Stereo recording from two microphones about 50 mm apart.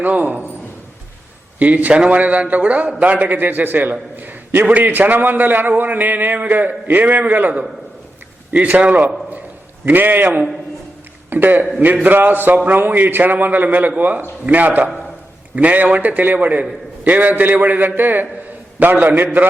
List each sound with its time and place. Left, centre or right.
0.0 s a man's voice: right
1.5 s a man's voice: right
4.2 s a sound: right
4.7 s a man's voice: right
8.5 s a man's voice: right